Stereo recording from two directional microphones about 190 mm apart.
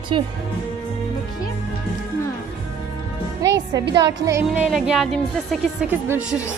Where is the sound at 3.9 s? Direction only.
15° right (ahead or behind).